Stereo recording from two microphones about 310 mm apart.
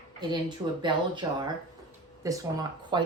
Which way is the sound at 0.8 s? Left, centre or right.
Centre.